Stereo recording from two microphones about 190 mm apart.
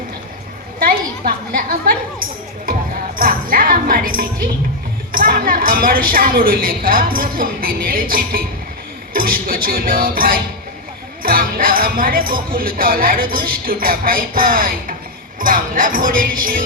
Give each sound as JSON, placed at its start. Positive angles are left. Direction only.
{"t": 0.8, "sound": "a woman's voice", "side_deg": -50}
{"t": 2.6, "sound": "music", "side_deg": -50}
{"t": 5.1, "sound": "speech", "side_deg": -50}